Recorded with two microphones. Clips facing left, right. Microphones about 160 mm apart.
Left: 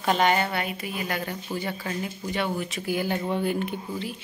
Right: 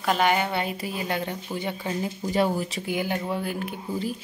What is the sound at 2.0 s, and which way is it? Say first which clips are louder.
Speech: right 7 dB; 35° right (ahead or behind).